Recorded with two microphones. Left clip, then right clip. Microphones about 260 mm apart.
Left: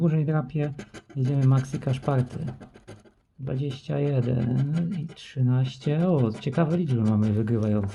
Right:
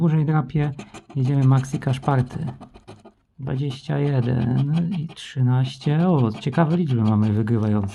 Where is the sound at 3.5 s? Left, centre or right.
Right.